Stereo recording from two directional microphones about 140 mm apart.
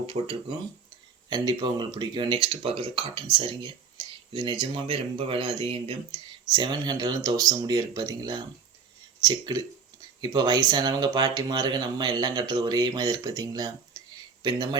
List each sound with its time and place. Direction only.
0.1 s speech: 75° right (ahead or behind)
1.3 s speech: 30° right (ahead or behind)
6.5 s speech: 30° right (ahead or behind)